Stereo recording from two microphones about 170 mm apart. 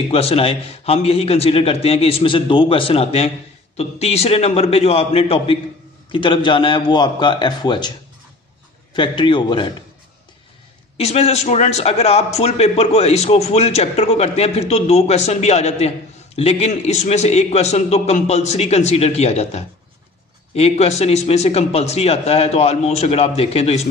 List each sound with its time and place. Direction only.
0.1 s a man's voice: 35° left (ahead or behind)
8.9 s a man's voice: 30° left (ahead or behind)
11.0 s a man's voice: 40° left (ahead or behind)